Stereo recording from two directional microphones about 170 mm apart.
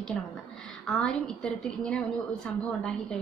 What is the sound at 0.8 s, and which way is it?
A woman's voice, 5° left (ahead or behind).